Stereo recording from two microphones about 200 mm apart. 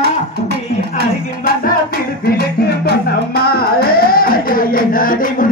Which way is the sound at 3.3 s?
50° left (ahead or behind).